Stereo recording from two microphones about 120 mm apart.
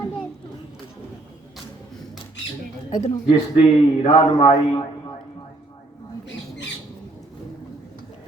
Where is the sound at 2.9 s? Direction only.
70° left (ahead or behind).